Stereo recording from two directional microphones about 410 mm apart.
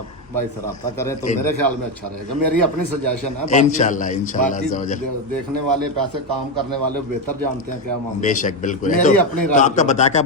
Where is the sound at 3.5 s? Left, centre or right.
Centre.